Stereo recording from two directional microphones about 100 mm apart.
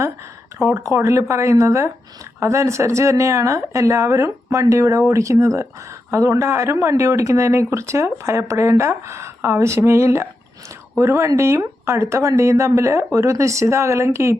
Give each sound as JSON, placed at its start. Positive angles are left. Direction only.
{"t": 0.6, "sound": "speech", "side_deg": -30}